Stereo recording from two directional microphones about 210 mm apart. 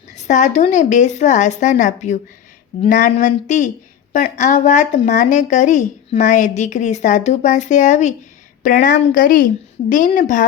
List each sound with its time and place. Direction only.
0.1 s a woman's voice: 35° left (ahead or behind)